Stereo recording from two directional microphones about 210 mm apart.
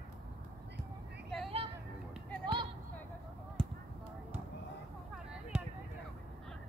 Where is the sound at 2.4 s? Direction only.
25° right (ahead or behind).